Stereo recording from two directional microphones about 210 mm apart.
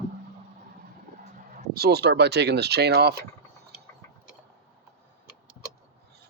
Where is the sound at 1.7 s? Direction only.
50° right (ahead or behind).